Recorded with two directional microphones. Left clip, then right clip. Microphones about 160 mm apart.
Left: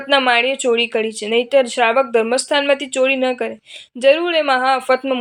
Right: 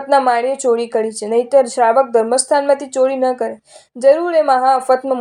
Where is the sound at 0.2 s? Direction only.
Centre (ahead or behind).